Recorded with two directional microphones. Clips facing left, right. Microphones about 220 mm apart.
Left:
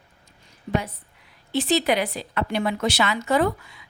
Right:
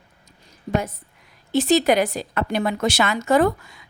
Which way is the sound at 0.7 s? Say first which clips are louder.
Right 2 dB; 45° right (ahead or behind).